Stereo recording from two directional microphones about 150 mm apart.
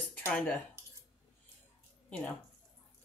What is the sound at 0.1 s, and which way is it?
Cutlery, 10° left (ahead or behind).